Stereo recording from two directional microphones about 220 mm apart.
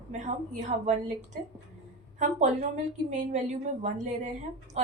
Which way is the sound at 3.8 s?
35° right (ahead or behind).